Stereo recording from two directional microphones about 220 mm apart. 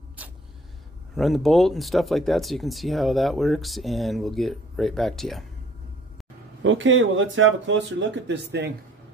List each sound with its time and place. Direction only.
0.2 s vehicle: 5° right (ahead or behind)
1.1 s speech: centre (ahead or behind)
6.6 s speech: 60° right (ahead or behind)